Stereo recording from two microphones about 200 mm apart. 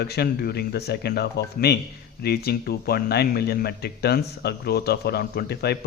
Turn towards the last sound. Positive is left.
turn(degrees=55)  # may be behind; listen again after turning